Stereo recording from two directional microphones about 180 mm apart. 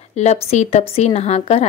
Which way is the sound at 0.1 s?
40° left (ahead or behind).